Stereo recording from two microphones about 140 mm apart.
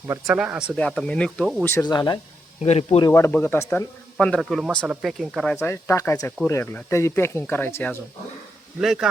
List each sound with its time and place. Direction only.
0.3 s speech: 5° right (ahead or behind)
0.8 s speech: 5° left (ahead or behind)
1.6 s speech: 15° left (ahead or behind)
1.9 s speech: 30° left (ahead or behind)
2.6 s speech: 50° left (ahead or behind)
3.1 s speech: 15° left (ahead or behind); by 5.5 s centre (ahead or behind)
5.5 s speech: 15° left (ahead or behind)
8.8 s speech: centre (ahead or behind)